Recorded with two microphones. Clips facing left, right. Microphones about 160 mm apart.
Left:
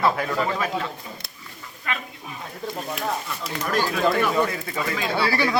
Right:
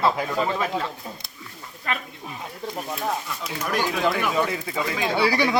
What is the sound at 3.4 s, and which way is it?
Speech, 10° right (ahead or behind).